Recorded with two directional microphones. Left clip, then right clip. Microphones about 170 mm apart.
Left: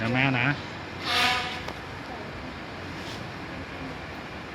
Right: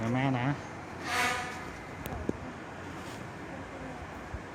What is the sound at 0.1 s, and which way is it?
Speech, 25° right (ahead or behind).